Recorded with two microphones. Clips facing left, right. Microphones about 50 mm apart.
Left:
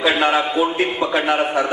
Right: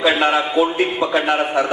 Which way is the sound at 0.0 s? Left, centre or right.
Centre.